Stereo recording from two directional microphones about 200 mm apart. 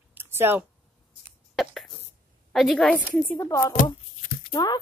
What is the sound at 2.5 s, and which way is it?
Speech, centre (ahead or behind).